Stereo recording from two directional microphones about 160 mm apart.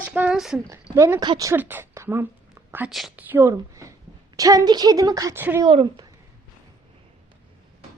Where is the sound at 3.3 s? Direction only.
15° right (ahead or behind).